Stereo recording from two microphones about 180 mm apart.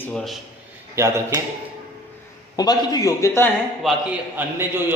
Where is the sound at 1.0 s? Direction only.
15° right (ahead or behind).